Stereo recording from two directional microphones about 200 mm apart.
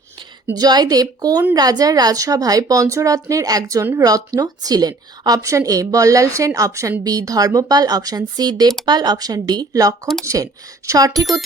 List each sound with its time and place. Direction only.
0.4 s a woman's voice: 20° right (ahead or behind)